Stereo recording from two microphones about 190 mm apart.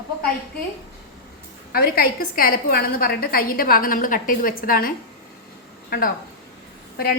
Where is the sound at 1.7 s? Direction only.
50° left (ahead or behind).